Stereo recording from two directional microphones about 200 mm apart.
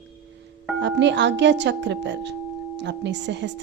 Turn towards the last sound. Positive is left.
turn(degrees=-60)  # may be behind; listen again after turning